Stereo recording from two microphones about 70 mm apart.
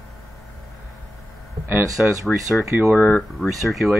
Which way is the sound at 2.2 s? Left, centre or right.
Centre.